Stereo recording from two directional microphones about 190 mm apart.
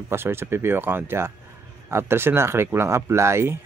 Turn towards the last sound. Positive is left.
turn(degrees=-15)  # may be behind; listen again after turning